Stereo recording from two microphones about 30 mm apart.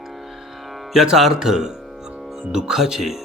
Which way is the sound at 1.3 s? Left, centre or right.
Centre.